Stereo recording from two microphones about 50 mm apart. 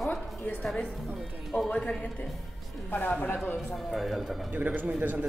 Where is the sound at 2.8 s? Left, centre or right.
Left.